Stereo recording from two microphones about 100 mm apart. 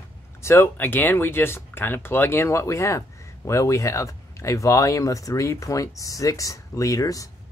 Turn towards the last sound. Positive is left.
turn(degrees=35)  # may be behind; listen again after turning